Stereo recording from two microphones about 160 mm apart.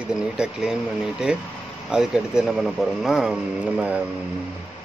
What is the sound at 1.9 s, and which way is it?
Speech, 5° right (ahead or behind).